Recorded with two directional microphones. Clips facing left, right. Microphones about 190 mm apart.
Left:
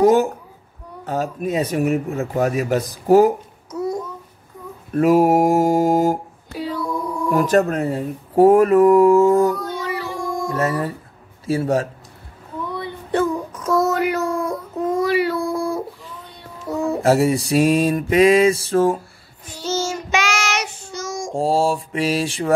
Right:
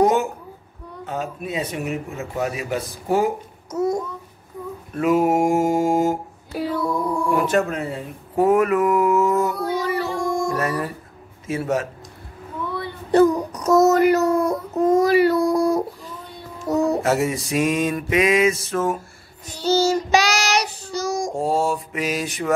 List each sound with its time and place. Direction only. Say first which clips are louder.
0.0 s a sound: left 4 dB; 35° left (ahead or behind)
1.0 s speech: left 5 dB; 40° left (ahead or behind)
3.7 s babbling: right 2 dB; 45° right (ahead or behind)
4.9 s speech: left 4 dB; 40° left (ahead or behind)
7.2 s speech: left 5 dB; 40° left (ahead or behind)
9.8 s music: right 3 dB; 45° right (ahead or behind)
10.5 s mantra: left 2 dB; 25° left (ahead or behind)
11.4 s speech: left 4 dB; 35° left (ahead or behind)
12.6 s a sound: even; 20° left (ahead or behind)
13.1 s child singing: right 5 dB; 40° right (ahead or behind)
16.7 s a sound: right 2 dB; 40° right (ahead or behind)
17.0 s speech: left 5 dB; 35° left (ahead or behind)
19.4 s child singing: right 5 dB; 35° right (ahead or behind)
21.4 s mantra: left 5 dB; 30° left (ahead or behind)